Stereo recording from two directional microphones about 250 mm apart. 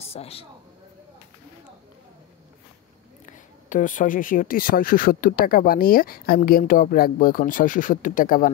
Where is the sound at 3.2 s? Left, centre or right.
Left.